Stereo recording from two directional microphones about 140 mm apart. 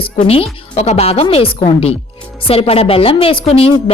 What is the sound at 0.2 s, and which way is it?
A woman's voice, 50° left (ahead or behind).